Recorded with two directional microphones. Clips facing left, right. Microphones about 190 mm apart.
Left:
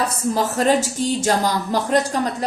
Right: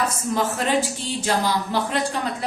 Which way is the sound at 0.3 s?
40° left (ahead or behind).